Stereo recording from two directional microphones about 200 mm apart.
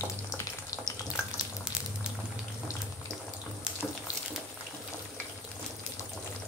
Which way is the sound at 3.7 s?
5° right (ahead or behind).